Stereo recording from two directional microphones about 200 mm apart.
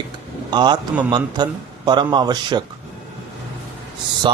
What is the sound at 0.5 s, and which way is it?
Speech, 20° right (ahead or behind).